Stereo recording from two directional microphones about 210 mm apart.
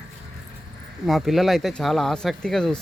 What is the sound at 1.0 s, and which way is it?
Speech, centre (ahead or behind).